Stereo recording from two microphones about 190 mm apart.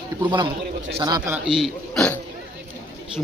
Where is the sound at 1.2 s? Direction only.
5° right (ahead or behind).